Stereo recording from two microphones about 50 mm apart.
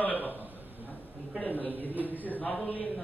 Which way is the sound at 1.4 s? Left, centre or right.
Left.